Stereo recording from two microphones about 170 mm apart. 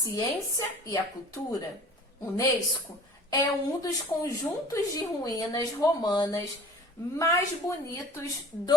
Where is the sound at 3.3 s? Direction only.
20° left (ahead or behind).